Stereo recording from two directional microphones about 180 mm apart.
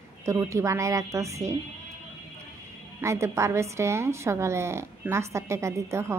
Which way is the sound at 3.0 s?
15° right (ahead or behind).